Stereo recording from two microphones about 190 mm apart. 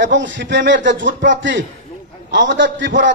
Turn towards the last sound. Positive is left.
turn(degrees=-75)  # may be behind; listen again after turning